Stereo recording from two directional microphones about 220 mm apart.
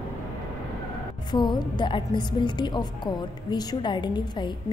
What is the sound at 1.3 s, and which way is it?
A woman's voice, 20° left (ahead or behind).